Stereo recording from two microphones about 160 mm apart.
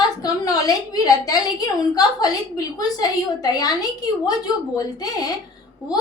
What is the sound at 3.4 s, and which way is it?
A woman's voice, 25° left (ahead or behind).